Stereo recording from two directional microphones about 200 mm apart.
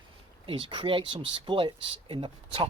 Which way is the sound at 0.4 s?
25° right (ahead or behind).